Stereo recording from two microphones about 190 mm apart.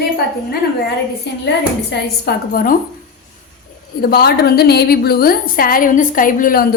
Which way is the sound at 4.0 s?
55° left (ahead or behind).